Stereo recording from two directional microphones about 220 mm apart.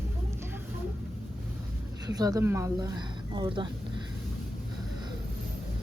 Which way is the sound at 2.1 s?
15° right (ahead or behind).